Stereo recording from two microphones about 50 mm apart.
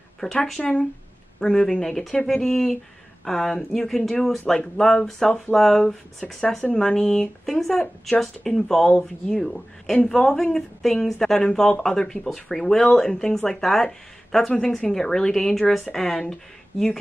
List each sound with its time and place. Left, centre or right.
0.2 s speech: centre